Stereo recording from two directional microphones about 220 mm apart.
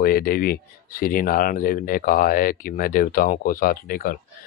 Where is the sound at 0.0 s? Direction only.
40° left (ahead or behind).